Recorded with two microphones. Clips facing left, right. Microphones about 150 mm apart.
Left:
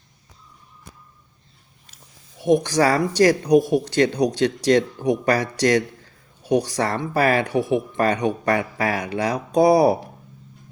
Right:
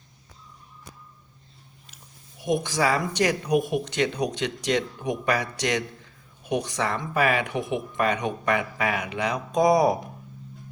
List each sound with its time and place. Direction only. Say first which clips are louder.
2.4 s speech: left 7 dB; 40° left (ahead or behind)